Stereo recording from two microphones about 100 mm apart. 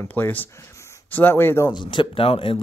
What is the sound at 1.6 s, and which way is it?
Speech, 50° left (ahead or behind).